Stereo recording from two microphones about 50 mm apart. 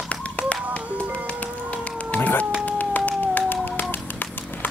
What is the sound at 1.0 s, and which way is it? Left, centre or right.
Music, right.